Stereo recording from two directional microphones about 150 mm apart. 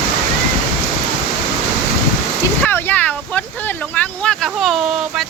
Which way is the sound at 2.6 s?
15° left (ahead or behind).